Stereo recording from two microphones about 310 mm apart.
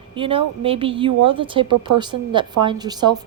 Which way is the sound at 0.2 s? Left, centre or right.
Centre.